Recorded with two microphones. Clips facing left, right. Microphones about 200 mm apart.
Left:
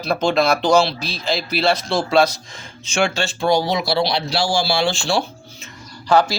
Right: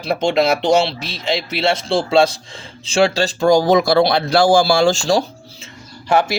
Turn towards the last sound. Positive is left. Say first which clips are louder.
# even
turn(degrees=-25)  # may be behind; listen again after turning